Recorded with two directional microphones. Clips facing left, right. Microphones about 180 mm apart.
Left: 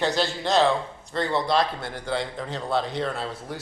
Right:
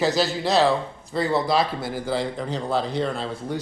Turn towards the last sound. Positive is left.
turn(degrees=0)  # may be behind; listen again after turning